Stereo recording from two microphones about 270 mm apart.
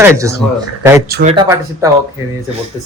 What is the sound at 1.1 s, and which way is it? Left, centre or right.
Speech, right.